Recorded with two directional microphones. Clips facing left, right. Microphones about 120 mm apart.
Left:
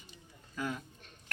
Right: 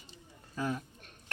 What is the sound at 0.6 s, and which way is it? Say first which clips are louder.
Child singing: right 3 dB; 35° right (ahead or behind).